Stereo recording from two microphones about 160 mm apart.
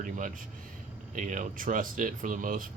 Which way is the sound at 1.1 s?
50° right (ahead or behind).